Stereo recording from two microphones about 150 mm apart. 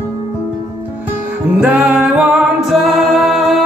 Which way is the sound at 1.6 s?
5° right (ahead or behind).